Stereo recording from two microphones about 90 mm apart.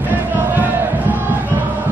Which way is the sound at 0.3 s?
20° right (ahead or behind).